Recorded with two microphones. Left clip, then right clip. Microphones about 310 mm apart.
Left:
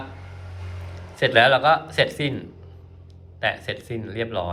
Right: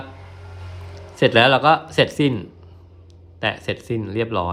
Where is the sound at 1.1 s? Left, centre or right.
Centre.